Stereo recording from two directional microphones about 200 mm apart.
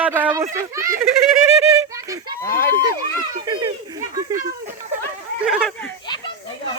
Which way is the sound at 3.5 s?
20° right (ahead or behind).